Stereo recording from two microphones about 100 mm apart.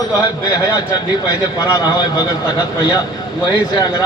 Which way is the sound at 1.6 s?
35° left (ahead or behind).